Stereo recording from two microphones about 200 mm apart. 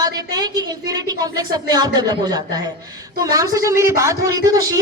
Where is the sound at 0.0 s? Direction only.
20° right (ahead or behind).